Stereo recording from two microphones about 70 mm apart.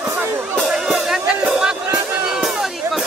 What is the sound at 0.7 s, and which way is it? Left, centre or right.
Music, centre.